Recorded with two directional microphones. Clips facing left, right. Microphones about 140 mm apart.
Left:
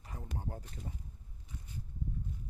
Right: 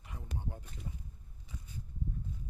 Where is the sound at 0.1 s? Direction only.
35° left (ahead or behind).